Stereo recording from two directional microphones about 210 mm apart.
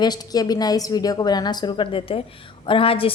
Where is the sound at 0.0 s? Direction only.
20° left (ahead or behind).